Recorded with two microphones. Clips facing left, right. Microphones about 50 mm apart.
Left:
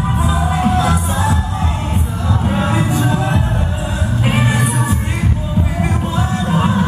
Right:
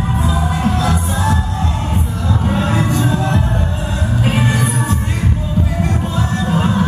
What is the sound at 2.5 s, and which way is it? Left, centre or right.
Music, centre.